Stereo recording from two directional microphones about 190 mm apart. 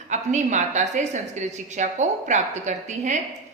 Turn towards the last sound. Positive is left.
turn(degrees=-40)  # may be behind; listen again after turning